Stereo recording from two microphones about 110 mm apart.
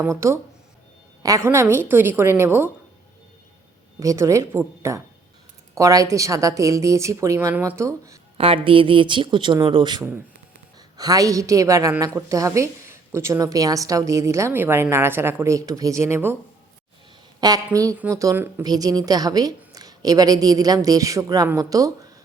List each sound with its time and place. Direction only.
0.0 s a woman's voice: 25° right (ahead or behind)
1.5 s a woman's voice: 20° right (ahead or behind)
4.0 s a woman's voice: 30° right (ahead or behind)
8.4 s speech: 60° right (ahead or behind)
10.9 s a woman's voice: 35° right (ahead or behind)
17.4 s a woman's voice: 35° right (ahead or behind)
18.6 s a woman's voice: 35° right (ahead or behind)